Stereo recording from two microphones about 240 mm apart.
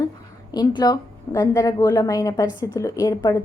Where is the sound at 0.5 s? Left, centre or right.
Centre.